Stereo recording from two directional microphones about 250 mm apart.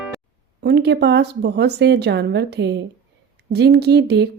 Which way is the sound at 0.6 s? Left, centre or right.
Right.